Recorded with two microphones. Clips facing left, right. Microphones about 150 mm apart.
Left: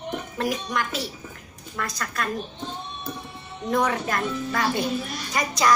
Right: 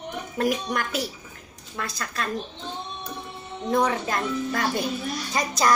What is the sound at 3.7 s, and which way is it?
Speech, 30° right (ahead or behind).